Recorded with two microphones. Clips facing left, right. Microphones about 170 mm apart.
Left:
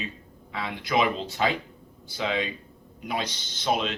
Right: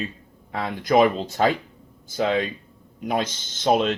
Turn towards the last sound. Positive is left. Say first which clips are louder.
# right 7 dB
turn(degrees=-45)  # may be behind; listen again after turning